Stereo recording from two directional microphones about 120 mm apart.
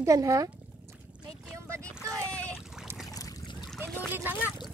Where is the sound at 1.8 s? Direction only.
10° left (ahead or behind).